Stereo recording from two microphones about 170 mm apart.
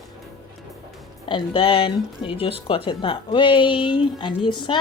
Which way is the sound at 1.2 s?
30° left (ahead or behind).